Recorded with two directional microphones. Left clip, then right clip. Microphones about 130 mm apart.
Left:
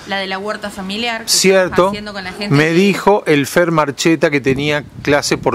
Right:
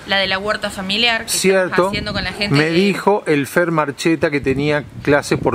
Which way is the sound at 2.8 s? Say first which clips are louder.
Left 3 dB; 25° left (ahead or behind).